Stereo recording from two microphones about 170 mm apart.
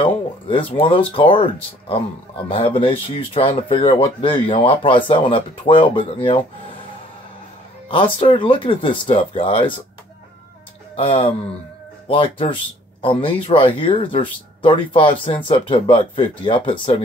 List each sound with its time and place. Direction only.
0.0 s speech: 30° left (ahead or behind)
7.9 s speech: 30° left (ahead or behind)
11.0 s speech: 35° left (ahead or behind)